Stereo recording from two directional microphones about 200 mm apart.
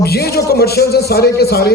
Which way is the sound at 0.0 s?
50° left (ahead or behind).